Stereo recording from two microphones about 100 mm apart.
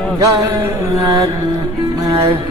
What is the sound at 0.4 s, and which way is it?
Music, 30° right (ahead or behind).